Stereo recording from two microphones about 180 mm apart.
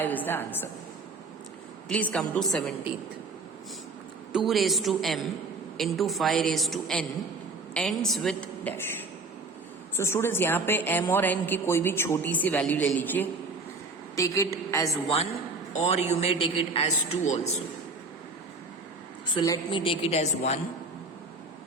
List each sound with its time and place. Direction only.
0.0 s a woman's voice: 10° left (ahead or behind)
1.9 s a woman's voice: 5° left (ahead or behind)
4.3 s a woman's voice: centre (ahead or behind)
10.0 s a woman's voice: 15° left (ahead or behind)
15.0 s a woman's voice: 30° left (ahead or behind)
19.3 s a woman's voice: 25° left (ahead or behind)